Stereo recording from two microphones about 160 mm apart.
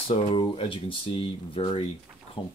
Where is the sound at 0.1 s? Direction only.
35° left (ahead or behind).